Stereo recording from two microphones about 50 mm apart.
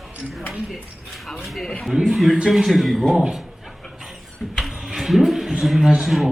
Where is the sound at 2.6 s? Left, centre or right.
Centre.